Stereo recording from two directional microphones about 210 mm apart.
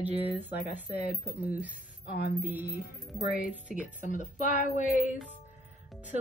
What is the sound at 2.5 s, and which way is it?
Speech, 10° right (ahead or behind).